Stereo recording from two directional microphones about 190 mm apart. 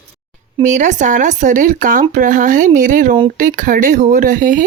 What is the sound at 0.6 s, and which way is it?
Speech, 40° right (ahead or behind).